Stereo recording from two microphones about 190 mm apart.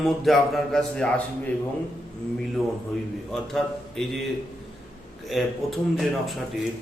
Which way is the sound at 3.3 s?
Centre (ahead or behind).